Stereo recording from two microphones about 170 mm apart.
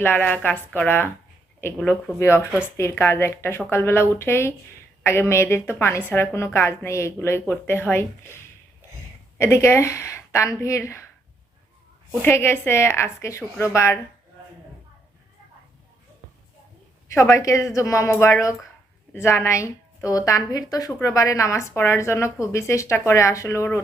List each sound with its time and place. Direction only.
0.0 s a woman's voice: 10° left (ahead or behind)
9.4 s a woman's voice: 15° left (ahead or behind)
12.2 s a woman's voice: 15° left (ahead or behind)
17.1 s a woman's voice: 20° left (ahead or behind)